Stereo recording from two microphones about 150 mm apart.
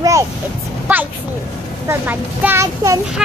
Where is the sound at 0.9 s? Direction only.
10° right (ahead or behind).